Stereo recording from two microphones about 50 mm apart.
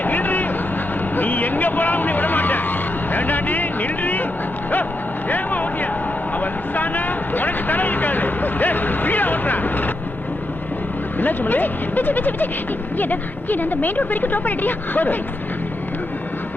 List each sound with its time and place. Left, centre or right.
0.0 s vehicle: left
5.3 s speech: left
11.2 s speech: left